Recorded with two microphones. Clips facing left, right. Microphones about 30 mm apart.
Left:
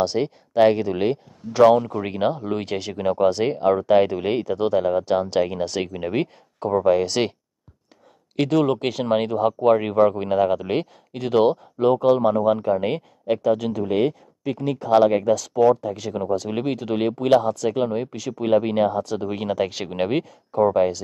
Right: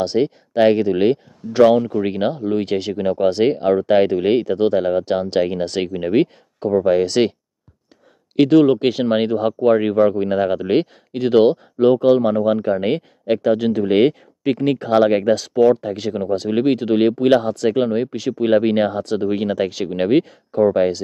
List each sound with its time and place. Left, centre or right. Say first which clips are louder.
0.0 s speech: right 4 dB; centre
2.4 s speech: right 6 dB; centre
3.2 s speech: right 3 dB; right
8.4 s speech: right 7 dB; centre
12.6 s speech: right 3 dB; right
13.8 s speech: right 6 dB; right
16.1 s speech: right 4 dB; right
17.4 s speech: right 4 dB; right
18.5 s speech: right 3 dB; right
19.2 s speech: right 7 dB; right
19.7 s speech: right 6 dB; centre
20.0 s speech: right 6 dB; right